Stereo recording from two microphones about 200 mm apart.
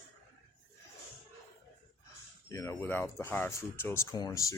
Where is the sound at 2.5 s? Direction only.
15° left (ahead or behind).